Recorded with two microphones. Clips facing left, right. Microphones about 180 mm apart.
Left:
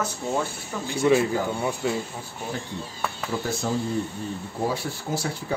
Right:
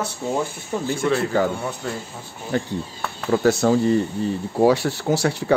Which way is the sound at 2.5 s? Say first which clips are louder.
Right 9 dB; 70° right (ahead or behind).